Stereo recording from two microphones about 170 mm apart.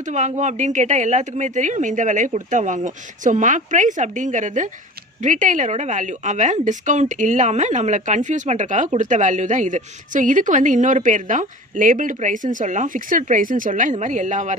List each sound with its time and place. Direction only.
0.0 s a woman's voice: 45° right (ahead or behind)